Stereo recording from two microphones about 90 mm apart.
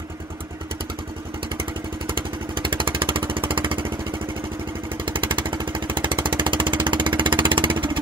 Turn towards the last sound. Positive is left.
turn(degrees=-65)  # may be behind; listen again after turning